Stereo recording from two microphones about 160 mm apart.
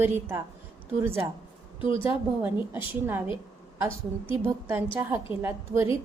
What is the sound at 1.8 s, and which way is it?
Speech, 35° left (ahead or behind).